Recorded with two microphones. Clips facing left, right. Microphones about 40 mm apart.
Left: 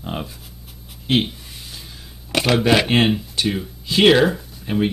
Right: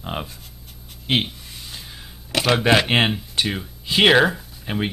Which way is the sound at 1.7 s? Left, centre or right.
Centre.